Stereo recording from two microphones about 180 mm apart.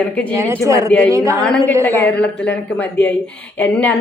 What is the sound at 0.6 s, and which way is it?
Speech, 15° right (ahead or behind).